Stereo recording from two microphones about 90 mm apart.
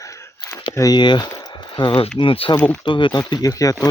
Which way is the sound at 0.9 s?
55° left (ahead or behind).